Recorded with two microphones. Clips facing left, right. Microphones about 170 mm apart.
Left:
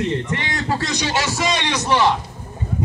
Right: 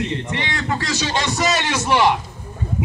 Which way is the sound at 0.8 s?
15° left (ahead or behind).